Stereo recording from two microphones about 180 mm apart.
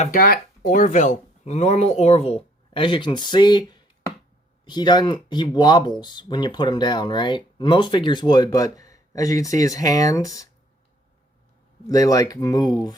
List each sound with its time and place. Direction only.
0.0 s speech: 50° left (ahead or behind); by 3.6 s 25° left (ahead or behind)
4.6 s speech: 25° left (ahead or behind)
11.9 s speech: 20° left (ahead or behind)